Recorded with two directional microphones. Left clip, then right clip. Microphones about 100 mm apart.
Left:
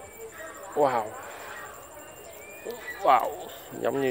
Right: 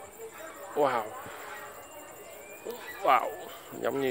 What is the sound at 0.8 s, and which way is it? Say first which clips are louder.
Speech: left 3 dB; 10° left (ahead or behind).